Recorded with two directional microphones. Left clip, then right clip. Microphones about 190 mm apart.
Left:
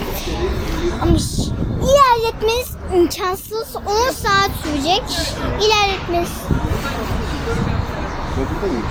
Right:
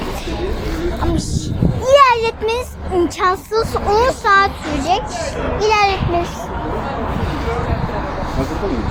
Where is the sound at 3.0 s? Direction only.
25° left (ahead or behind).